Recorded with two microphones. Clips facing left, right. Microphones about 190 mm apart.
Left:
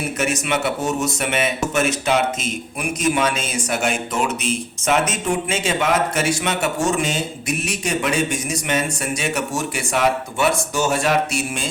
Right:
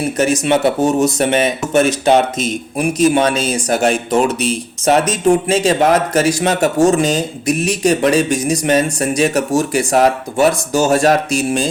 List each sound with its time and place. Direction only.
0.2 s speech: 35° right (ahead or behind)